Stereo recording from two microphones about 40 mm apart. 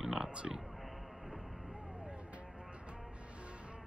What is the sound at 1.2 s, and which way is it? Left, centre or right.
Music, right.